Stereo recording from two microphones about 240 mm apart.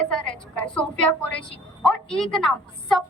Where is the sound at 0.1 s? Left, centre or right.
Centre.